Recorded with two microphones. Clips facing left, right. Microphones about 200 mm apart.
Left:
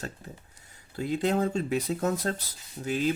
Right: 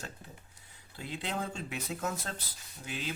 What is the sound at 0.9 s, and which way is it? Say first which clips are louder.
Speech: left 11 dB; 45° left (ahead or behind).